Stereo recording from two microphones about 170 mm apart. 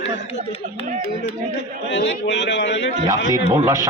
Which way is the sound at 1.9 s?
90° left.